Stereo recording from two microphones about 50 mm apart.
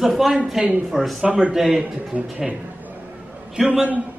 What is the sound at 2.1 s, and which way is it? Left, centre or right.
Speech, right.